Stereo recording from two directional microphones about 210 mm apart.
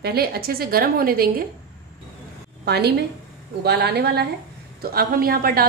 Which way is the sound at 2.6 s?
50° right (ahead or behind).